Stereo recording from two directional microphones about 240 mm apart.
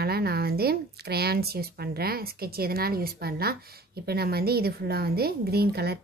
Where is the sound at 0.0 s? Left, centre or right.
Right.